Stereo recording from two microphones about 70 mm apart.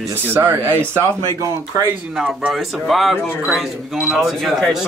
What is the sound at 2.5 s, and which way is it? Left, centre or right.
Speech, centre.